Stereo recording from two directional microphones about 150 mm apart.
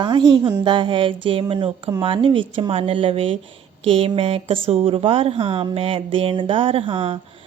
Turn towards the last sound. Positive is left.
turn(degrees=-35)  # may be behind; listen again after turning